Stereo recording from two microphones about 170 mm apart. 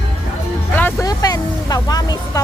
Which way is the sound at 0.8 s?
10° left (ahead or behind).